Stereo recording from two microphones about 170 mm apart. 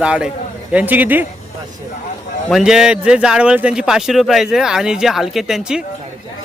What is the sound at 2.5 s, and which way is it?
Speech, centre (ahead or behind).